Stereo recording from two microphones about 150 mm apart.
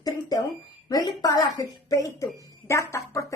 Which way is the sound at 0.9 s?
25° left (ahead or behind).